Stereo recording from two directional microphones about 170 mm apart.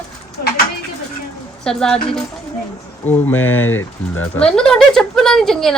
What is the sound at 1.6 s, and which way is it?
Speech, 5° left (ahead or behind).